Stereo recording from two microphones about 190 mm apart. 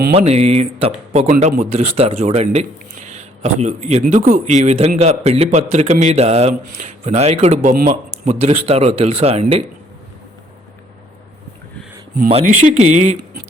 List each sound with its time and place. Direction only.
0.1 s speech: 35° right (ahead or behind)
1.3 s speech: 45° right (ahead or behind)
12.3 s speech: 35° right (ahead or behind)